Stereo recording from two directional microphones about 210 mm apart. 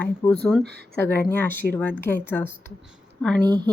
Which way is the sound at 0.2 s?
10° left (ahead or behind).